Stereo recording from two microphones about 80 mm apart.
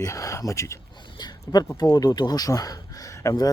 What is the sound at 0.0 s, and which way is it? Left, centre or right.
Speech, left.